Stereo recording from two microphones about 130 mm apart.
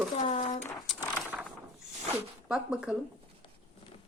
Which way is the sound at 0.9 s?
5° right (ahead or behind).